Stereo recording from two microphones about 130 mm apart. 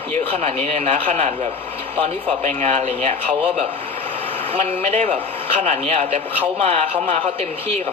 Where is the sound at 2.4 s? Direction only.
60° right (ahead or behind).